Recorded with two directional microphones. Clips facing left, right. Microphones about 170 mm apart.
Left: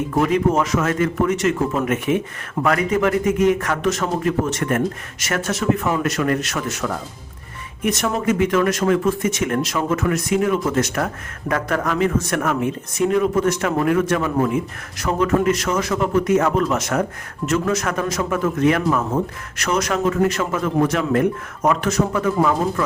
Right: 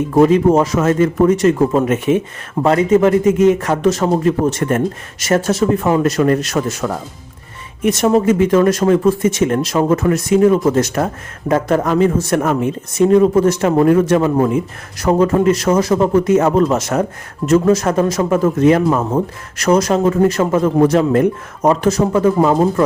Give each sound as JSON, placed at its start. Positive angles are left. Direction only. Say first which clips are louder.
{"t": 0.1, "sound": "a man's voice", "louder": "right 8 dB", "side_deg": -30}